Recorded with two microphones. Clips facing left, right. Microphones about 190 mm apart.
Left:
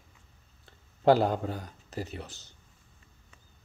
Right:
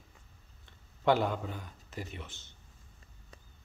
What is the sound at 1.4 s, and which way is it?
A man's voice, 40° left (ahead or behind).